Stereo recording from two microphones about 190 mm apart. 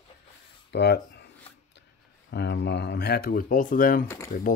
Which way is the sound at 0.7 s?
60° left (ahead or behind).